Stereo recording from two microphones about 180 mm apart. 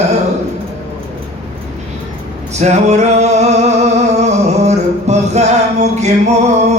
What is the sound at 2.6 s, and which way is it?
Male singing, 40° right (ahead or behind).